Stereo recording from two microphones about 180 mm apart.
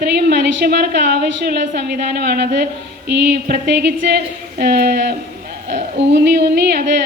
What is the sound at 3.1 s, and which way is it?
A woman's voice, 65° right (ahead or behind).